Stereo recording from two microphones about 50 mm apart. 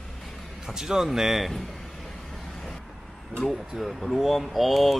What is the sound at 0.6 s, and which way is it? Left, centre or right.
Speech, centre.